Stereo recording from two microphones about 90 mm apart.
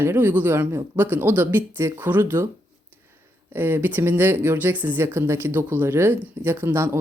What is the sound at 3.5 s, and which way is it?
Speech, 25° right (ahead or behind).